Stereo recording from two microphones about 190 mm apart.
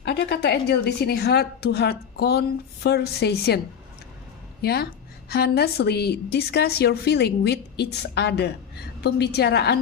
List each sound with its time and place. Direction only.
0.0 s a woman's voice: 60° left (ahead or behind)